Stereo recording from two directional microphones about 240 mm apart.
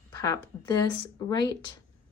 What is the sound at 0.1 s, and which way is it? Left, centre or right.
A woman's voice, centre.